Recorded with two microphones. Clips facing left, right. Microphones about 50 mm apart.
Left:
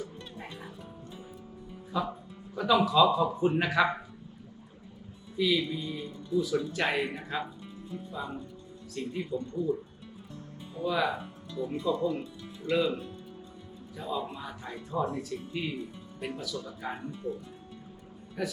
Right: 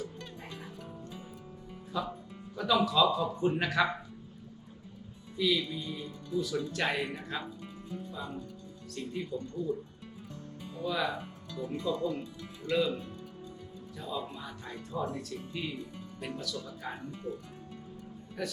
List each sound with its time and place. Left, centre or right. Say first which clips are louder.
0.0 s music: left 1 dB; centre
1.9 s a man's voice: left 3 dB; centre
5.4 s a man's voice: left 2 dB; centre
10.8 s a man's voice: left 4 dB; centre
14.8 s a man's voice: left 4 dB; left
18.4 s a man's voice: left 3 dB; centre